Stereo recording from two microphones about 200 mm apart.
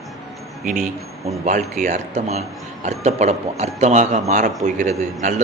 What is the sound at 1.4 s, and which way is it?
Speech, 35° right (ahead or behind).